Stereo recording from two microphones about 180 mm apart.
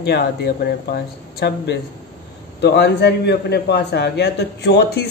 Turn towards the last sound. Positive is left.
turn(degrees=65)  # may be behind; listen again after turning